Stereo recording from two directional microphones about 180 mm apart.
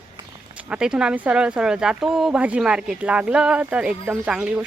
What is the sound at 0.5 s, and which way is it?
Speech, 5° right (ahead or behind).